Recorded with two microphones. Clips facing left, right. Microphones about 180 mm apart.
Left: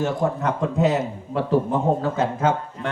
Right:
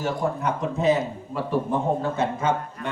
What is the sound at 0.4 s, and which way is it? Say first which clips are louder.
Speech: right 1 dB; 85° left.